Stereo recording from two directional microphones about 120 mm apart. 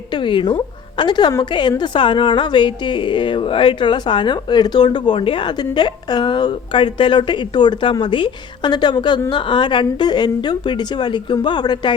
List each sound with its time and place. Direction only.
0.1 s a woman's voice: 45° left (ahead or behind)